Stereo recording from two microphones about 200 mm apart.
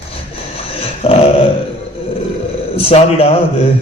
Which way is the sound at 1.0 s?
30° left (ahead or behind).